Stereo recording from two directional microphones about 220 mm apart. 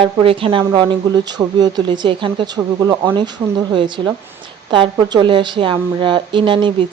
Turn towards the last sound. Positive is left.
turn(degrees=-20)  # may be behind; listen again after turning